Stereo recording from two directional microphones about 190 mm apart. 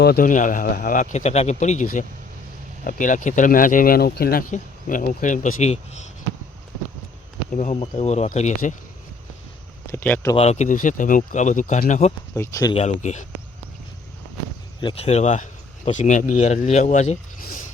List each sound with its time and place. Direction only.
0.0 s speech: 50° left (ahead or behind); by 6.0 s 35° left (ahead or behind)
7.5 s speech: 40° left (ahead or behind)
9.9 s speech: 10° left (ahead or behind)
10.3 s speech: 35° left (ahead or behind)
12.3 s speech: 15° left (ahead or behind)
12.7 s speech: 35° left (ahead or behind)
14.8 s speech: 30° left (ahead or behind)